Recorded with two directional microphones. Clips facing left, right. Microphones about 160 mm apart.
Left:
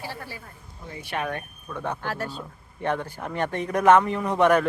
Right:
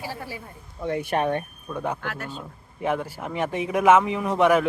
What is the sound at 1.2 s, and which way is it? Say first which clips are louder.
Speech: right 6 dB; 25° right (ahead or behind).